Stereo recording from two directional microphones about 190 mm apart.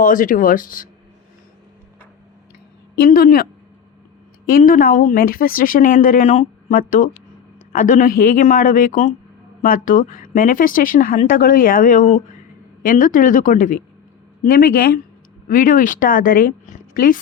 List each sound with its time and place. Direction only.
0.0 s speech: 45° left (ahead or behind)
3.0 s speech: 50° left (ahead or behind)
4.4 s speech: 45° left (ahead or behind)